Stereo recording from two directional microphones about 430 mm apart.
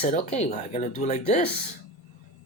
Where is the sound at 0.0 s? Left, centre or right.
Centre.